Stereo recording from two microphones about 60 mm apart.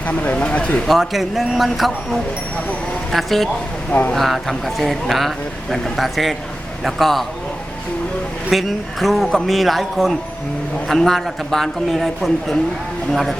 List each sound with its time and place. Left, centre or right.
0.1 s speech: left
0.9 s a man's voice: centre
8.4 s a man's voice: centre